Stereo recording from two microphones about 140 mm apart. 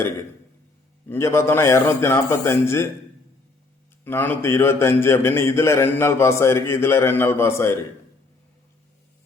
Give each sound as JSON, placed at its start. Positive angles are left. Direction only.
{"t": 1.1, "sound": "a man's voice", "side_deg": 20}
{"t": 4.0, "sound": "a man's voice", "side_deg": 15}